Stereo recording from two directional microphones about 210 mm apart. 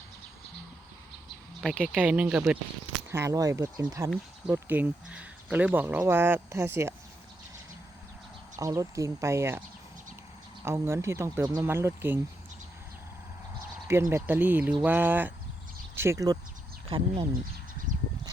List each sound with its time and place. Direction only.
1.6 s speech: 5° right (ahead or behind)
8.5 s speech: 15° right (ahead or behind)
13.8 s speech: 10° right (ahead or behind)